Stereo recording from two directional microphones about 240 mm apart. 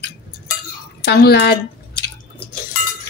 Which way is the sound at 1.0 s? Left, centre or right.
Left.